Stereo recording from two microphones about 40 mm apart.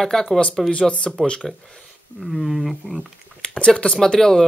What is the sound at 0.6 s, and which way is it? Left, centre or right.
Speech, left.